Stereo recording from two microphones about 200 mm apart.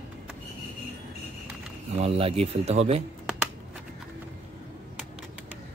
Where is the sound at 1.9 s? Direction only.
30° right (ahead or behind).